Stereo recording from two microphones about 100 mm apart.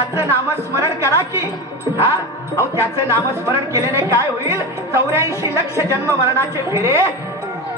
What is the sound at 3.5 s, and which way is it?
A woman's voice, 30° right (ahead or behind).